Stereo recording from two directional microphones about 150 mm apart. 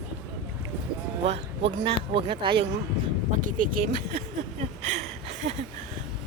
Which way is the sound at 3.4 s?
60° right (ahead or behind).